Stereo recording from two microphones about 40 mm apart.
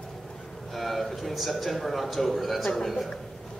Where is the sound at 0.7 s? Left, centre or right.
Centre.